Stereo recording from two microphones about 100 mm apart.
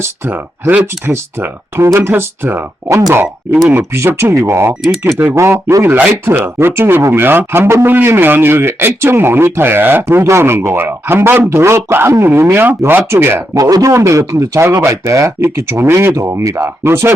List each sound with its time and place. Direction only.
0.0 s speech: 20° right (ahead or behind)
4.7 s speech: 10° right (ahead or behind)
5.2 s speech: 25° right (ahead or behind)
13.6 s speech: 40° right (ahead or behind)